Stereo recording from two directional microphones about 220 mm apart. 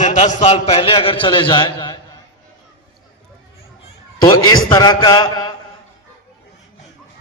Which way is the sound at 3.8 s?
20° left (ahead or behind).